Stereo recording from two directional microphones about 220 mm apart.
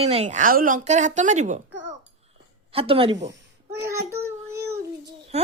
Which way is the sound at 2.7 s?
25° right (ahead or behind).